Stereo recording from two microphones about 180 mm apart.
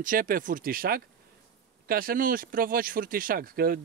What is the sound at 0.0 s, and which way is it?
Speech, 50° right (ahead or behind).